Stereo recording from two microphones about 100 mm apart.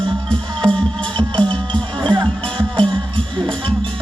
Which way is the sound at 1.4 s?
10° left (ahead or behind).